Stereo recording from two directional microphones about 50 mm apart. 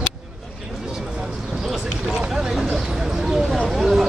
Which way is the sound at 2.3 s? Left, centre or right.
Centre.